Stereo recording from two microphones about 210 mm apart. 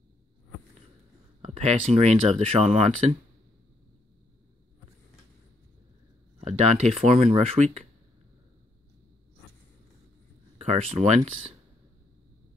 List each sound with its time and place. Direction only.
1.4 s speech: 30° right (ahead or behind)
6.4 s speech: 30° right (ahead or behind)
10.6 s speech: 30° right (ahead or behind)